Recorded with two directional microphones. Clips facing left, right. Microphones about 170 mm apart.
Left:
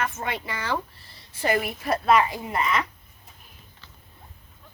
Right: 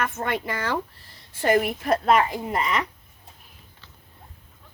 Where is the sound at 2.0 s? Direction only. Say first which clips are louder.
Left 2 dB; 45° right (ahead or behind).